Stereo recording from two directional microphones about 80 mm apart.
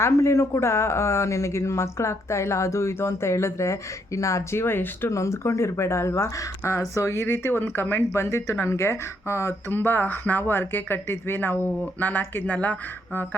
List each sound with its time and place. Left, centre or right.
0.0 s speech: left